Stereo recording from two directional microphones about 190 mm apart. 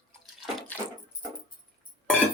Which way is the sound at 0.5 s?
5° left (ahead or behind).